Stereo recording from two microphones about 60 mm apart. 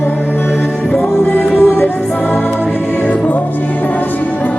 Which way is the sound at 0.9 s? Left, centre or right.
Left.